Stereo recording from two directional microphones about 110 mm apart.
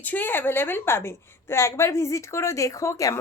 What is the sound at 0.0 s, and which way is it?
A woman's voice, 15° left (ahead or behind).